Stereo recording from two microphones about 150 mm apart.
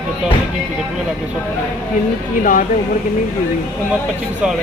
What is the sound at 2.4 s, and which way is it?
Speech, 65° left (ahead or behind).